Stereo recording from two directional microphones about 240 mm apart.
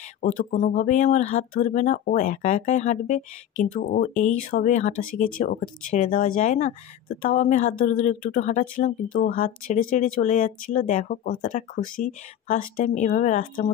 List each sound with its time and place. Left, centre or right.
0.2 s speech: left